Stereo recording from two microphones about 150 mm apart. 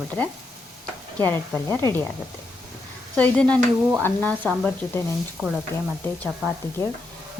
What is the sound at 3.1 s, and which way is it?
Speech, 10° left (ahead or behind).